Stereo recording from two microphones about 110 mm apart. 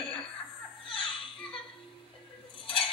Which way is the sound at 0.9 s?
50° left (ahead or behind).